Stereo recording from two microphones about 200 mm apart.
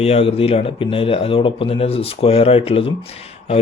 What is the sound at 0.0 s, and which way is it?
Speech, 30° left (ahead or behind).